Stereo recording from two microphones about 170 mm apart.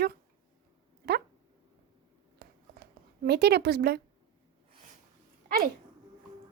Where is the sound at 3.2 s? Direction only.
70° right (ahead or behind).